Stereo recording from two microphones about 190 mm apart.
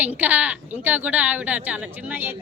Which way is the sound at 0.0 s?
10° right (ahead or behind).